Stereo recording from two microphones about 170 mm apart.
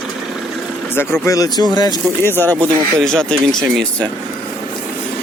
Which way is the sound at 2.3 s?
10° left (ahead or behind).